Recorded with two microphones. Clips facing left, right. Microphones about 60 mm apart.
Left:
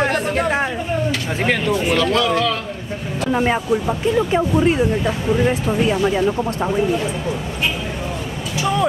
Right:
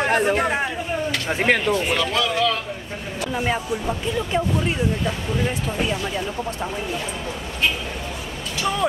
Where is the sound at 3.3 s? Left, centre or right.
Left.